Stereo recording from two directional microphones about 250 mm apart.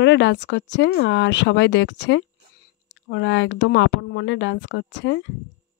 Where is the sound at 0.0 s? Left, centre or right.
Left.